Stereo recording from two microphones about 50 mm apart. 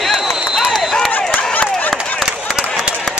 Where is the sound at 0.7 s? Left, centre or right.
Centre.